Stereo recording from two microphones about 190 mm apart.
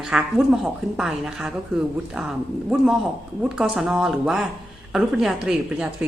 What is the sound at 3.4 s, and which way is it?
A woman's voice, 5° right (ahead or behind).